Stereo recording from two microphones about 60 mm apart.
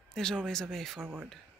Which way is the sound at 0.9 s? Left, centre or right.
Right.